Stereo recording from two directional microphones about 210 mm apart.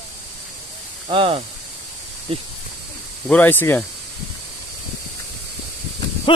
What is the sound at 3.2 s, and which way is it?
Speech, 5° left (ahead or behind).